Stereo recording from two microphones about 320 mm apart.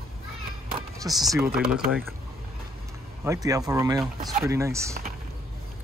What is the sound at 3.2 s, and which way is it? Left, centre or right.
Speech, centre.